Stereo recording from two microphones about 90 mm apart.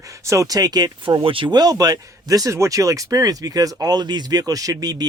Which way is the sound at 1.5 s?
45° right (ahead or behind).